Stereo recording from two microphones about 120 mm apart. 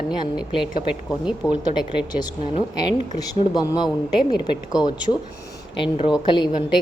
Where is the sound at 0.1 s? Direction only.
40° left (ahead or behind).